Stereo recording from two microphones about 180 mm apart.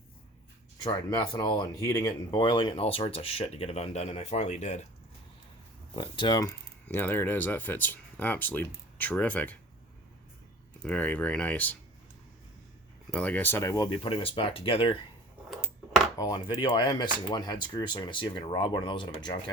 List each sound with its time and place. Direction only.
0.8 s speech: 25° left (ahead or behind); by 4.9 s 40° left (ahead or behind)
6.0 s speech: 25° left (ahead or behind)
6.8 s speech: 10° left (ahead or behind)
10.8 s speech: 10° left (ahead or behind)
13.1 s speech: 10° left (ahead or behind)
13.9 s speech: 30° left (ahead or behind)
16.1 s speech: 20° left (ahead or behind)